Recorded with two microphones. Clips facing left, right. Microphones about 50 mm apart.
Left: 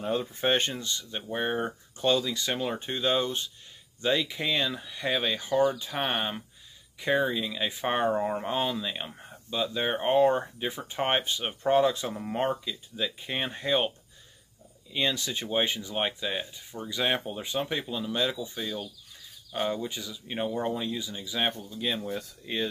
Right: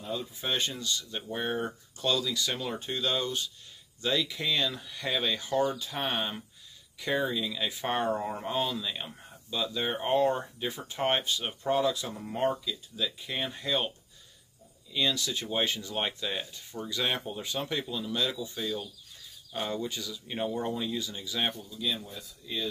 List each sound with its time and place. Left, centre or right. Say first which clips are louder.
0.0 s speech: left 7 dB; left
1.2 s speech: left 4 dB; centre
14.9 s speech: left 1 dB; left
21.5 s speech: left 2 dB; left
22.0 s speech: left 9 dB; left